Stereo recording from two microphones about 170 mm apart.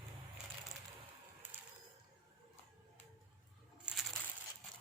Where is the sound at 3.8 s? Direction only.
Centre (ahead or behind).